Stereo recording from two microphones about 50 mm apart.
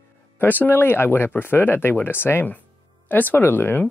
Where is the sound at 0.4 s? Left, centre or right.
Left.